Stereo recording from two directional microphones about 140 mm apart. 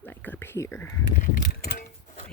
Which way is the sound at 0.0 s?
10° left (ahead or behind).